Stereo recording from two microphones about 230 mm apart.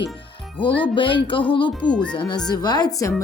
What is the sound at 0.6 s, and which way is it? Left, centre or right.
Speech, left.